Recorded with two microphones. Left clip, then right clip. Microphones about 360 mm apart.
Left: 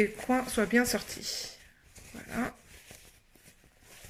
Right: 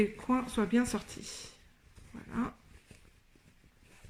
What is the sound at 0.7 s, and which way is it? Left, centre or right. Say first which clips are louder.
Speech: left 5 dB; centre.